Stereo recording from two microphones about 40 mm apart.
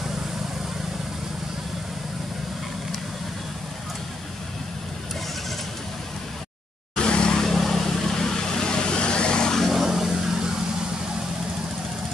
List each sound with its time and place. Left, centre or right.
7.0 s vehicle: left
7.3 s vehicle: centre
9.7 s vehicle: centre